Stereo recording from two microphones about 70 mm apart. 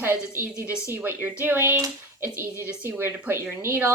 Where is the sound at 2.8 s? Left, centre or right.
Right.